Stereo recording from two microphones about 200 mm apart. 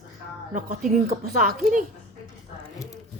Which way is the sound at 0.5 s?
40° right (ahead or behind).